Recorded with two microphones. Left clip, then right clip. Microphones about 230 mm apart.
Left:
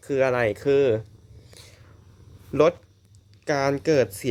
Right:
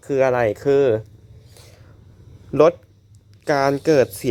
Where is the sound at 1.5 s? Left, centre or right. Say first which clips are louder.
Right 1 dB; centre.